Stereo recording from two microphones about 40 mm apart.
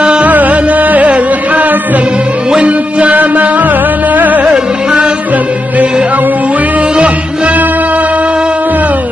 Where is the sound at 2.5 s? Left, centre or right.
Right.